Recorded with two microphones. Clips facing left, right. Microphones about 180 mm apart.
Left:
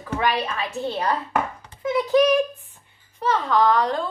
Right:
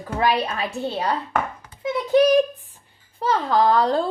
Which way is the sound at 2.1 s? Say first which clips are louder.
Right 3 dB; 30° right (ahead or behind).